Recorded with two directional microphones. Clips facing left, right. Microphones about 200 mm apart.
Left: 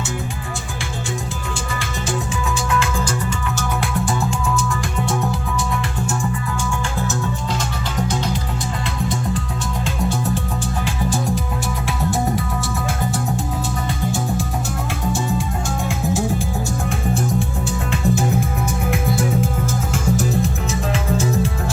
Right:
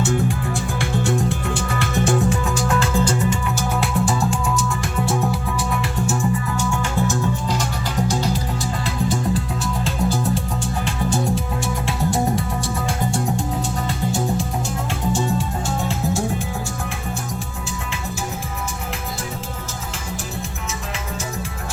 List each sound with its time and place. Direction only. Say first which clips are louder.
1.5 s music: right 4 dB; 55° right (ahead or behind)
2.7 s music: right 3 dB; 35° right (ahead or behind)
9.8 s music: even; centre (ahead or behind)